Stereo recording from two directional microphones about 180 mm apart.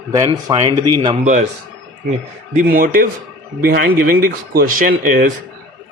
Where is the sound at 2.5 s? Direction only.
50° right (ahead or behind).